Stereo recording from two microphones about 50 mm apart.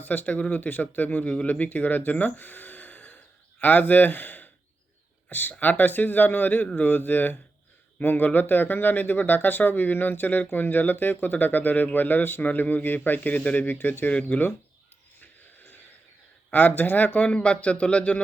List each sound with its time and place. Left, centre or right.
0.0 s speech: left
14.1 s speech: left
15.2 s a sound: left
16.5 s speech: left
17.2 s speech: left